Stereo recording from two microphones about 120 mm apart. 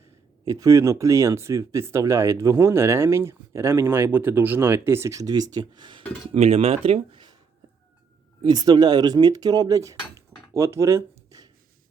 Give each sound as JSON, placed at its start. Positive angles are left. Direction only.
{"t": 0.4, "sound": "speech", "side_deg": -25}
{"t": 6.3, "sound": "speech", "side_deg": -60}
{"t": 8.4, "sound": "speech", "side_deg": -35}
{"t": 10.5, "sound": "a sound", "side_deg": -25}